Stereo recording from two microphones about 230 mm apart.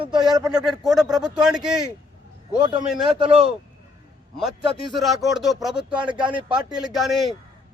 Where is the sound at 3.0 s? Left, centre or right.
Right.